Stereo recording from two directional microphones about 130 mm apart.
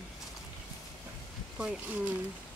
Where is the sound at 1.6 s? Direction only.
10° right (ahead or behind).